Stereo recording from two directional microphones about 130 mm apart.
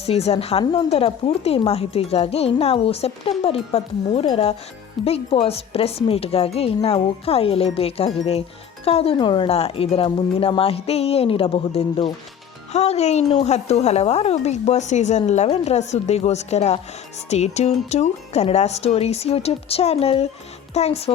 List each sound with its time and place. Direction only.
0.0 s a woman's voice: 50° left (ahead or behind)
9.1 s a woman's voice: 40° left (ahead or behind)
12.7 s a woman's voice: 55° left (ahead or behind)